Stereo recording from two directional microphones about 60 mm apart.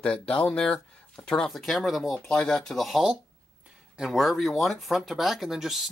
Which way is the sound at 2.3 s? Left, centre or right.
Centre.